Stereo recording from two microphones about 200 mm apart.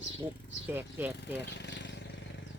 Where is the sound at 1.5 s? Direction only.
60° left (ahead or behind).